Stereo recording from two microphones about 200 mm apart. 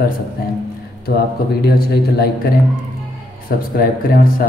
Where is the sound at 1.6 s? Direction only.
50° left (ahead or behind).